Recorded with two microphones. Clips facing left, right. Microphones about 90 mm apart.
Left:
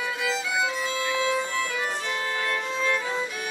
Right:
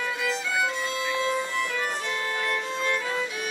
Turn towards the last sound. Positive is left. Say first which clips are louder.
# left 1 dB
turn(degrees=0)  # may be behind; listen again after turning